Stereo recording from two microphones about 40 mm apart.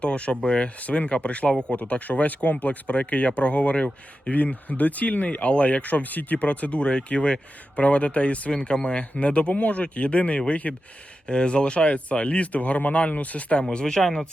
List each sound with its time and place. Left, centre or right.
0.0 s speech: left
0.8 s speech: left
2.6 s speech: left
9.1 s speech: left
13.7 s speech: centre